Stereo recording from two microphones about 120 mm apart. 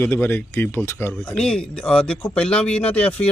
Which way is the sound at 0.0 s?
20° left (ahead or behind).